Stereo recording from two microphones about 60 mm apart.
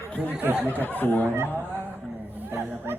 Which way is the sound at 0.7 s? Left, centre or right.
Left.